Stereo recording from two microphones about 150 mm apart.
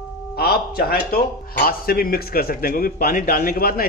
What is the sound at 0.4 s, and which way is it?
Speech, 90° left.